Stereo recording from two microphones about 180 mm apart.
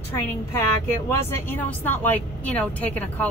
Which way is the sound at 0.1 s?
15° left (ahead or behind).